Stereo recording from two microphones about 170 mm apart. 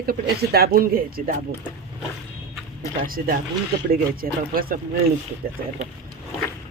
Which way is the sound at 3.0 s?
60° right (ahead or behind).